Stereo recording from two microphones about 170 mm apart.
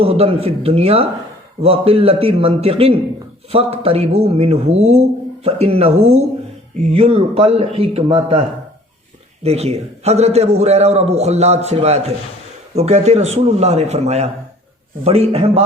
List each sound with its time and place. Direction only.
0.0 s speech: 35° right (ahead or behind)